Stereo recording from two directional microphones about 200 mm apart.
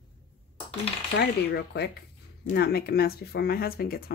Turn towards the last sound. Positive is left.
turn(degrees=50)  # may be behind; listen again after turning